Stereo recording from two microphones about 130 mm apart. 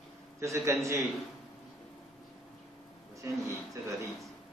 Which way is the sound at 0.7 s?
20° right (ahead or behind).